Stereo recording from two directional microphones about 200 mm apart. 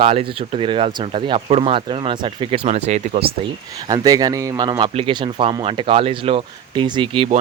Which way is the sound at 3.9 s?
20° right (ahead or behind).